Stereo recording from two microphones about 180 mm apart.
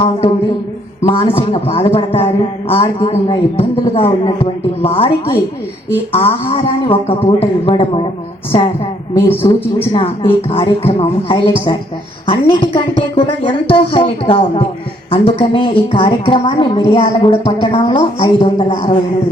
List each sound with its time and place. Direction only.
1.0 s a woman's voice: 35° left (ahead or behind)
6.1 s a woman's voice: 30° left (ahead or behind)
9.1 s a man's voice: 15° left (ahead or behind)
9.9 s a woman's voice: 30° left (ahead or behind)